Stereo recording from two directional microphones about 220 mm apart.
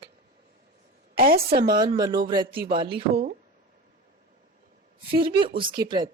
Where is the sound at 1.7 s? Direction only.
20° right (ahead or behind).